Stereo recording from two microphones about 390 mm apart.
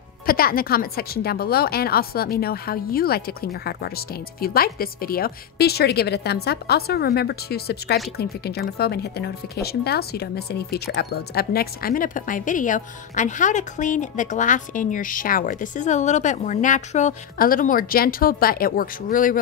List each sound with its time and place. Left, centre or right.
0.3 s speech: left